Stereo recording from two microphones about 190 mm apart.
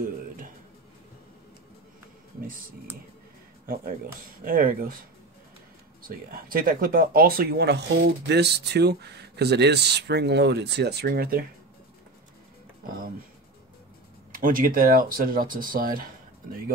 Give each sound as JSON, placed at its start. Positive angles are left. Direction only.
{"t": 3.6, "sound": "speech", "side_deg": -50}
{"t": 6.0, "sound": "speech", "side_deg": -50}
{"t": 14.3, "sound": "speech", "side_deg": -45}